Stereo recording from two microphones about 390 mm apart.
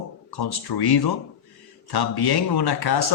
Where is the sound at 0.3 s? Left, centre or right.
Left.